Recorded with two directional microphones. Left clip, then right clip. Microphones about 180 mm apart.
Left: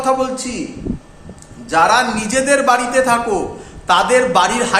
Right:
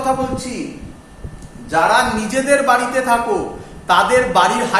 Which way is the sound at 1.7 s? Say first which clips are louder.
Left 1 dB; 40° left (ahead or behind).